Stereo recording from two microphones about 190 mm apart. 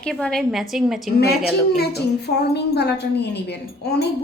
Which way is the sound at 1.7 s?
55° left (ahead or behind).